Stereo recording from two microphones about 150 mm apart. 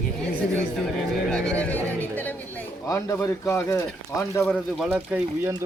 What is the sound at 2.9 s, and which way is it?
Speech, 20° left (ahead or behind).